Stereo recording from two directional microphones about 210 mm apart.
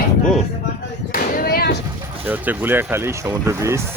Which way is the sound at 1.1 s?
45° left (ahead or behind).